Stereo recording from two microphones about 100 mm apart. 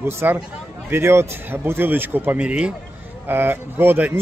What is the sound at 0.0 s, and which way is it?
Speech, 25° right (ahead or behind).